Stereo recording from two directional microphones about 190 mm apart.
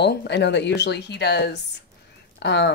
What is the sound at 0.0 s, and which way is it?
Speech, 60° left (ahead or behind).